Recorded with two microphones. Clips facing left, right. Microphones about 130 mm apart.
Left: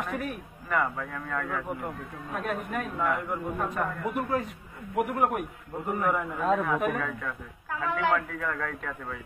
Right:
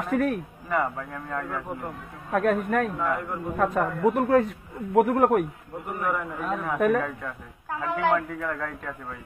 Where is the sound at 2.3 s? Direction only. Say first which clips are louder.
Right 9 dB; 55° right (ahead or behind).